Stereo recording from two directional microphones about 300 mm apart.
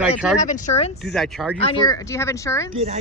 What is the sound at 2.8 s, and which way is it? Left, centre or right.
Speech, right.